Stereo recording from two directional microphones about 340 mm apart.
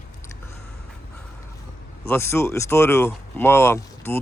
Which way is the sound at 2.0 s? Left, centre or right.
Centre.